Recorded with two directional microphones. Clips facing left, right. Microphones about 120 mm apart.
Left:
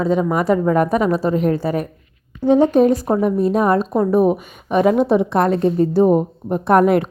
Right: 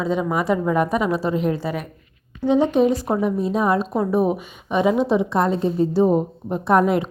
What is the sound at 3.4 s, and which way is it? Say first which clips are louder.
Speech: left 4 dB; 55° left (ahead or behind).